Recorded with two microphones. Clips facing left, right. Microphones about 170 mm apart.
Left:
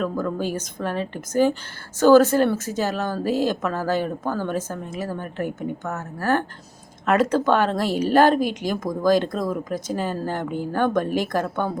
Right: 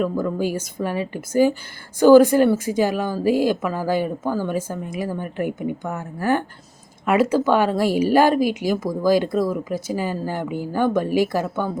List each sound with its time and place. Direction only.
0.0 s speech: 10° right (ahead or behind)